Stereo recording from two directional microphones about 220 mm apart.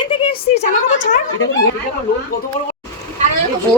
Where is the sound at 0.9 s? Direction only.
60° left (ahead or behind).